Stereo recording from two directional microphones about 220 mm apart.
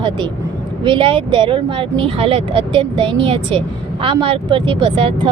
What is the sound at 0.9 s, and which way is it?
Speech, 25° right (ahead or behind).